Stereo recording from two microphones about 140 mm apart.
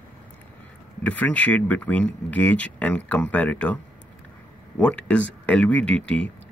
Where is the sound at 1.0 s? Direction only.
10° left (ahead or behind).